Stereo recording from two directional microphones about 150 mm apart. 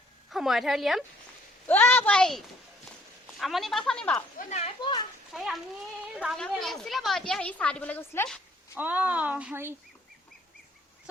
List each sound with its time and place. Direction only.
0.3 s a woman's voice: centre (ahead or behind)
1.6 s a woman's voice: 10° left (ahead or behind)
4.4 s speech: 50° left (ahead or behind)
4.8 s a child's voice: 30° left (ahead or behind)
5.3 s a child's voice: centre (ahead or behind); by 8.3 s 15° left (ahead or behind)
8.7 s speech: 10° right (ahead or behind)